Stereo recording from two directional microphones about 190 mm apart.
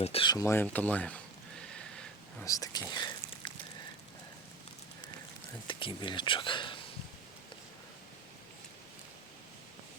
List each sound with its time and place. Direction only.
0.0 s speech: 30° left (ahead or behind); by 1.2 s 5° left (ahead or behind)
2.4 s whispering: 20° left (ahead or behind)
5.6 s speech: 25° left (ahead or behind)